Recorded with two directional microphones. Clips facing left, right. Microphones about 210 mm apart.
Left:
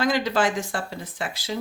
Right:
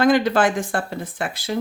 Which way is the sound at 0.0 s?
55° right (ahead or behind).